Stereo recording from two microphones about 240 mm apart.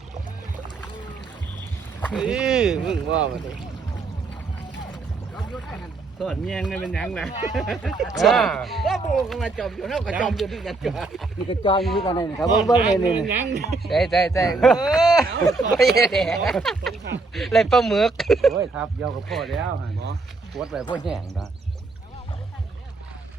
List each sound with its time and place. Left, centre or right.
2.0 s rowboat: centre
2.2 s speech: centre
5.4 s speech: centre
11.4 s a man's voice: left
12.6 s speech: centre
13.2 s speech: right
13.8 s speech: centre